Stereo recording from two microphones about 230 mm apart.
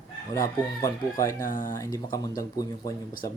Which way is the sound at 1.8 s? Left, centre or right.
Centre.